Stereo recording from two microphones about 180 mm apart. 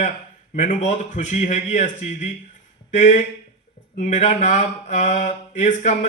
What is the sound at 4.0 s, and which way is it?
Mantra, 45° left (ahead or behind).